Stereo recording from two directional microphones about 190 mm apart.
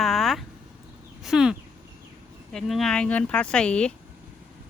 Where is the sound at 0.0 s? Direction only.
Centre (ahead or behind).